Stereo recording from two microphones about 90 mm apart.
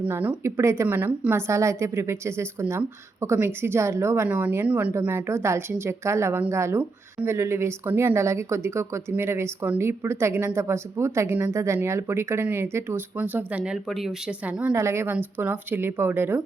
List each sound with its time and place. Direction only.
0.4 s a woman's voice: 30° right (ahead or behind); by 4.9 s 15° right (ahead or behind)
4.9 s a woman's voice: 30° right (ahead or behind)
14.8 s speech: 30° right (ahead or behind)